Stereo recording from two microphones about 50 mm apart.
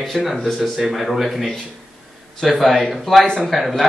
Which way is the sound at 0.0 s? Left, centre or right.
Centre.